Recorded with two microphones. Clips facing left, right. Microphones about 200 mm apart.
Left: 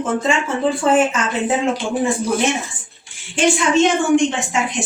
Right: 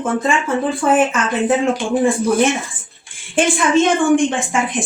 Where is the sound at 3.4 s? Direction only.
55° right (ahead or behind).